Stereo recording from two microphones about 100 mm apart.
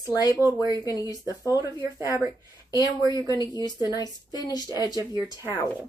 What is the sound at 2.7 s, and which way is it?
Speech, 35° right (ahead or behind).